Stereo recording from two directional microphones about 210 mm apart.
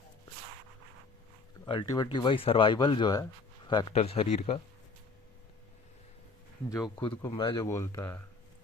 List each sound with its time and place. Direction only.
1.6 s speech: 20° left (ahead or behind)
6.7 s speech: 15° left (ahead or behind)